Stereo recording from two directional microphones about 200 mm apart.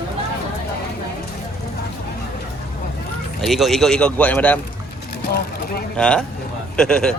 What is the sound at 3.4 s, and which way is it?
Speech, centre (ahead or behind).